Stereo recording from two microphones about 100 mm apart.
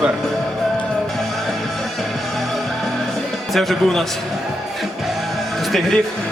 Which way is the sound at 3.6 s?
Centre (ahead or behind).